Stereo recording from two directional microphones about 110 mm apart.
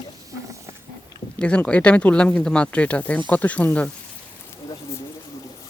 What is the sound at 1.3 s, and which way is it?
Speech, 10° left (ahead or behind).